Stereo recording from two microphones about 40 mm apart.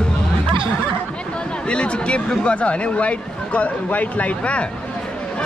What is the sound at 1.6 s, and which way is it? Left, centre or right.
Speech, left.